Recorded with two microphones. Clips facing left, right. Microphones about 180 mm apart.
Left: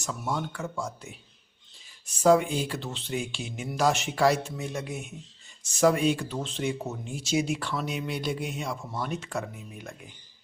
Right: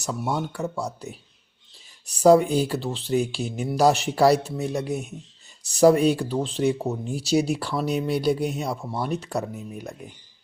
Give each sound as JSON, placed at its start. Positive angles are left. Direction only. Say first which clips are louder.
{"t": 0.0, "sound": "speech", "louder": "right 4 dB", "side_deg": -35}